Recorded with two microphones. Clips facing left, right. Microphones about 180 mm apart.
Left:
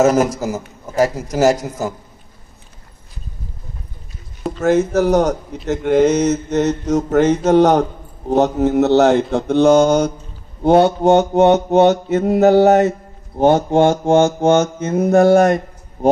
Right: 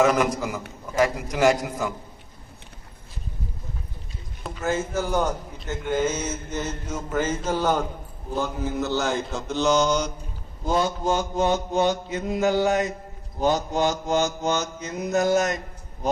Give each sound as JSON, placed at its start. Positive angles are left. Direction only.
{"t": 0.0, "sound": "a man's voice", "side_deg": 45}
{"t": 4.6, "sound": "mantra", "side_deg": 75}
{"t": 10.6, "sound": "mantra", "side_deg": 65}